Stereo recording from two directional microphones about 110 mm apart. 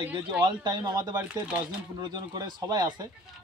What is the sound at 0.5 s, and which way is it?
Speech, 40° right (ahead or behind).